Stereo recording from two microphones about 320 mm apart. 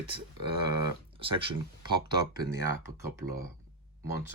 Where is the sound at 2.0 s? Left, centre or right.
Centre.